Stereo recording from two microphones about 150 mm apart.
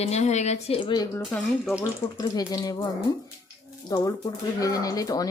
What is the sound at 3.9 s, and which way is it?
Speech, 25° left (ahead or behind).